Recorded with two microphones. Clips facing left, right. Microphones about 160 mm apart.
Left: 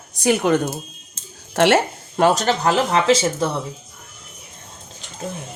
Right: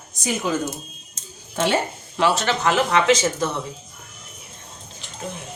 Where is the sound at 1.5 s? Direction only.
80° left.